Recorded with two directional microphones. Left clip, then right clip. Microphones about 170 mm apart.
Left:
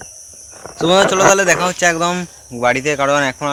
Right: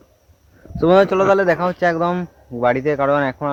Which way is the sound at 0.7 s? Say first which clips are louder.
Left 1 dB; 35° right (ahead or behind).